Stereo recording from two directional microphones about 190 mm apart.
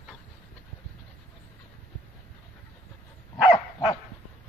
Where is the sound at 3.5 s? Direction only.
20° left (ahead or behind).